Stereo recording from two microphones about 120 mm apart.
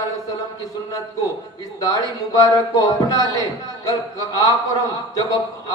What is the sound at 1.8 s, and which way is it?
A man's voice, 30° left (ahead or behind).